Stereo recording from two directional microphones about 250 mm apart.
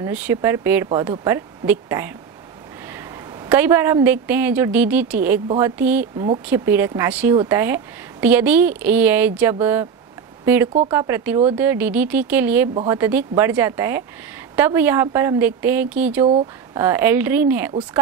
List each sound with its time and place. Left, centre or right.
0.0 s a woman's voice: centre
6.1 s speech: centre
6.4 s speech: centre